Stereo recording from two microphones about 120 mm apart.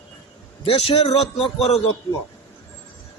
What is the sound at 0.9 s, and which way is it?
Speech, 40° left (ahead or behind).